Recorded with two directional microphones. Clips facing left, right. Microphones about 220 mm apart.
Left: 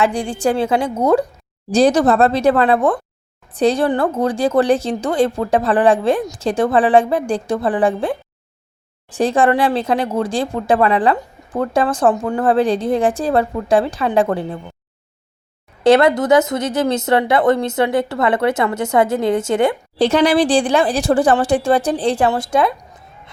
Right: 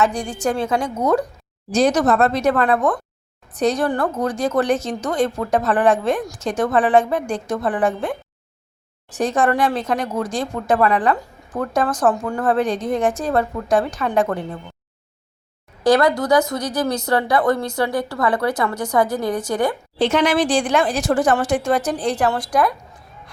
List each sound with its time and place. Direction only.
0.0 s speech: 30° left (ahead or behind)
9.1 s speech: 30° left (ahead or behind)
15.8 s speech: 25° left (ahead or behind)
20.0 s speech: 35° left (ahead or behind)